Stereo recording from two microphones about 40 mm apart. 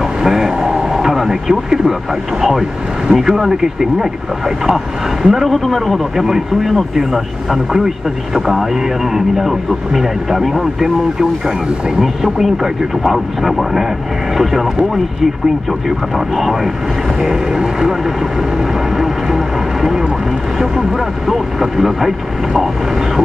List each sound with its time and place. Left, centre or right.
0.2 s vehicle: centre
0.9 s radio: centre
3.1 s speech: centre
5.2 s speech: centre
16.3 s speech: centre
18.9 s speech: centre
21.3 s speech: centre